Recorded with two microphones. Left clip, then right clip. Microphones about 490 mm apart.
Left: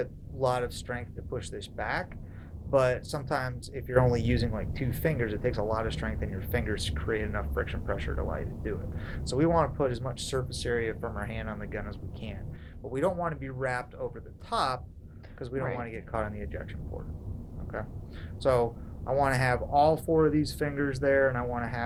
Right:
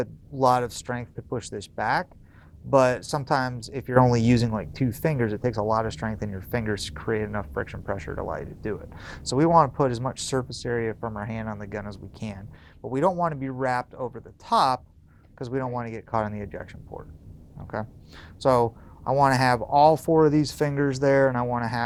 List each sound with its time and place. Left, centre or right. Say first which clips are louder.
0.0 s speech: right 7 dB; right
18.3 s speech: right 5 dB; right